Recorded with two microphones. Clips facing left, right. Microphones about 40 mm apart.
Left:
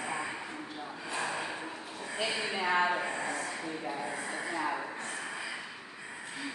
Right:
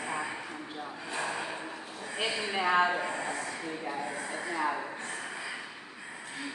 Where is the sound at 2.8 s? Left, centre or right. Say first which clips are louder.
Right 1 dB; centre.